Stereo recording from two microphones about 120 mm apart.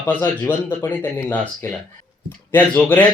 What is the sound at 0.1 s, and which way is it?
Speech, 15° left (ahead or behind).